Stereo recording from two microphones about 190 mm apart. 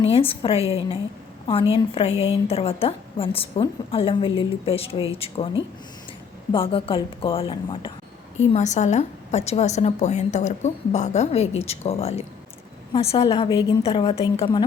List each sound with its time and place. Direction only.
0.0 s a woman's voice: 30° left (ahead or behind)
8.4 s a woman's voice: 40° left (ahead or behind)